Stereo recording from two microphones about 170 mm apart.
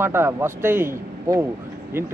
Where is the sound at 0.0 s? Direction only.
15° right (ahead or behind).